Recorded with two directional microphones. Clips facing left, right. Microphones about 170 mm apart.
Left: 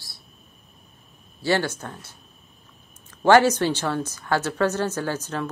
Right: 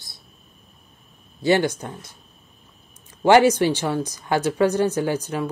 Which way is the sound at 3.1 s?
15° right (ahead or behind).